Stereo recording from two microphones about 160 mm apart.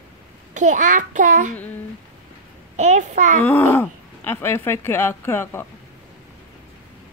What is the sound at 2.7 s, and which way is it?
Speech, 50° right (ahead or behind).